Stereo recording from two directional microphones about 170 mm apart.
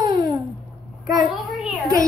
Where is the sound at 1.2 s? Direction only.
5° right (ahead or behind).